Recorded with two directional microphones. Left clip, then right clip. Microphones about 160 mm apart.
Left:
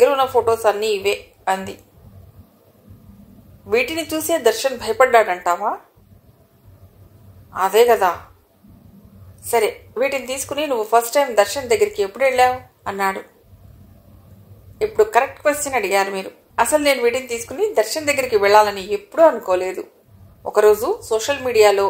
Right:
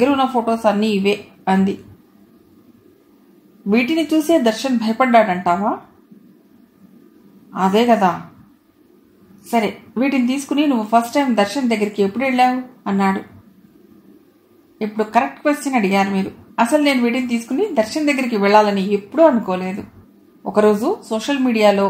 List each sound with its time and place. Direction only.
0.0 s speech: 40° left (ahead or behind)
3.7 s speech: 40° left (ahead or behind)
7.5 s speech: 40° left (ahead or behind)
9.5 s speech: 40° left (ahead or behind)
14.8 s speech: 40° left (ahead or behind)